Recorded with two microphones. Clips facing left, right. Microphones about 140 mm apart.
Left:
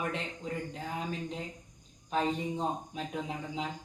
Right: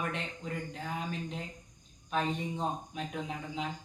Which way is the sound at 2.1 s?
30° left (ahead or behind).